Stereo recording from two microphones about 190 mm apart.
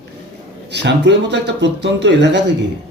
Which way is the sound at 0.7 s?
65° right (ahead or behind).